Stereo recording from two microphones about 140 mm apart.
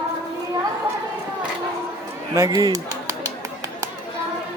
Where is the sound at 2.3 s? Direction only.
20° right (ahead or behind).